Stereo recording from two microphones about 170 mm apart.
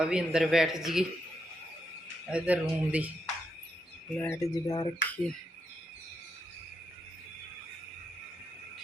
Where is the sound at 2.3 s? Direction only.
10° right (ahead or behind).